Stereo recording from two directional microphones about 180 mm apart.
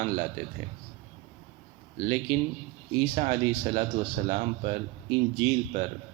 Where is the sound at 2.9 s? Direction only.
40° right (ahead or behind).